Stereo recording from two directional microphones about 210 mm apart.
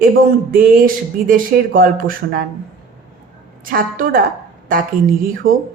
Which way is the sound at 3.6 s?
40° right (ahead or behind).